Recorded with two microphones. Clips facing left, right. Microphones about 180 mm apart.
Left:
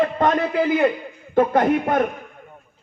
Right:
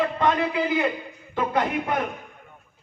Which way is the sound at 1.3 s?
50° left (ahead or behind).